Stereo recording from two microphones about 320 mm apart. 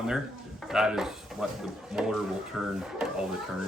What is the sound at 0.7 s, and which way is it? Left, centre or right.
Speech, centre.